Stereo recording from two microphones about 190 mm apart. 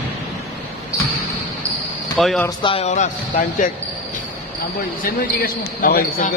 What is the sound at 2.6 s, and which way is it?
A man's voice, 35° left (ahead or behind).